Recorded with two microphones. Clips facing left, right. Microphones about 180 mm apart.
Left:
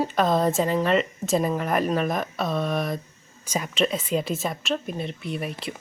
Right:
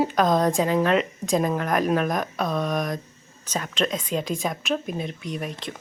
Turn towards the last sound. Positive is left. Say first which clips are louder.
# left 1 dB
turn(degrees=5)  # may be behind; listen again after turning